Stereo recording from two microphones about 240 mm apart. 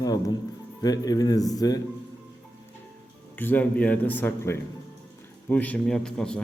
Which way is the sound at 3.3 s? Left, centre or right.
Centre.